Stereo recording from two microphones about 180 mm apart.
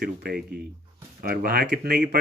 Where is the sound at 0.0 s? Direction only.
60° right (ahead or behind).